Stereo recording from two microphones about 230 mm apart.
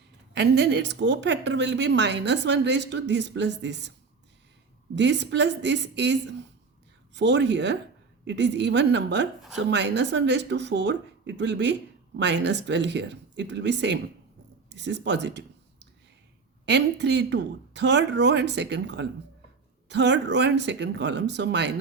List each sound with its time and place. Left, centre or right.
0.3 s speech: right
4.9 s speech: right
14.7 s a sound: right
16.6 s speech: right